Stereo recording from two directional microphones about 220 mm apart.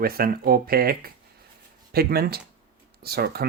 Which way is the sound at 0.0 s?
40° right (ahead or behind).